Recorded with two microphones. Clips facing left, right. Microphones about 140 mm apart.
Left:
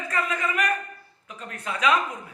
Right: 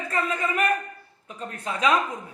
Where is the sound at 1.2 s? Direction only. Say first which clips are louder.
Right 2 dB; 35° right (ahead or behind).